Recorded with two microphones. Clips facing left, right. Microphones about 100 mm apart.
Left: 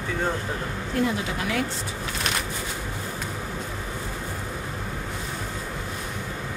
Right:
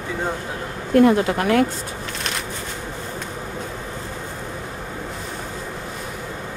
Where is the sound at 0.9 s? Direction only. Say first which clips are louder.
Right 11 dB; 55° right (ahead or behind).